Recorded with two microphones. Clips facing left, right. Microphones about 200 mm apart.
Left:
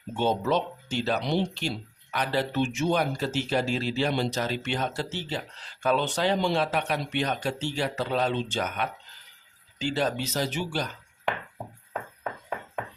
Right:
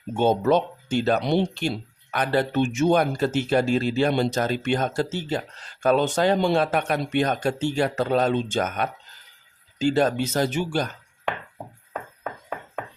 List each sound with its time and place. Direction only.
0.2 s speech: 50° right (ahead or behind)